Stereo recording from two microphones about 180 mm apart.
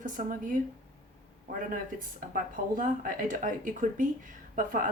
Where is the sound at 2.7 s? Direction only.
50° right (ahead or behind).